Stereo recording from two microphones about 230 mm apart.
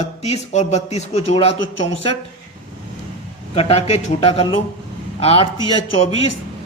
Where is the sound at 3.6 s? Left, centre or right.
Left.